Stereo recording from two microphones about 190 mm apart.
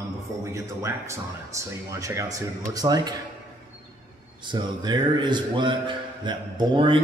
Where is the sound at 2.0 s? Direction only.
15° right (ahead or behind).